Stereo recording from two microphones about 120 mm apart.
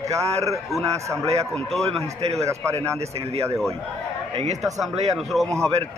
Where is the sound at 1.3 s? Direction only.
60° right (ahead or behind).